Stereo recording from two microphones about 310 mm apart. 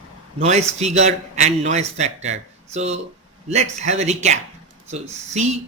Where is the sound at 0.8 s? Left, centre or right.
Right.